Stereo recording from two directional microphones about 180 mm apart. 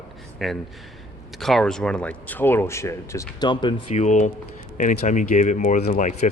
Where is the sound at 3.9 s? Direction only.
40° left (ahead or behind).